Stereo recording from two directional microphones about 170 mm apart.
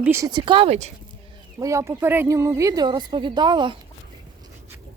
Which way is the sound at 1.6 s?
15° right (ahead or behind).